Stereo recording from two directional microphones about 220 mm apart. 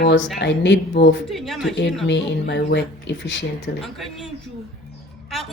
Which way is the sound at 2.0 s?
50° left (ahead or behind).